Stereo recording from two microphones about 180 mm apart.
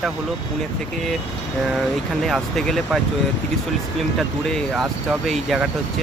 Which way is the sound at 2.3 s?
Centre (ahead or behind).